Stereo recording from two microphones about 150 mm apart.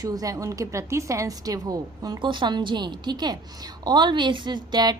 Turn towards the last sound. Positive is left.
turn(degrees=-25)  # may be behind; listen again after turning